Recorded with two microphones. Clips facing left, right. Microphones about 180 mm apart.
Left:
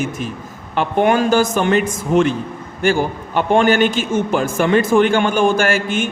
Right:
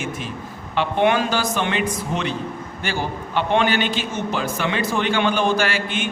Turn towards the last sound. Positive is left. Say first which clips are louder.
# left 5 dB
turn(degrees=45)  # may be behind; listen again after turning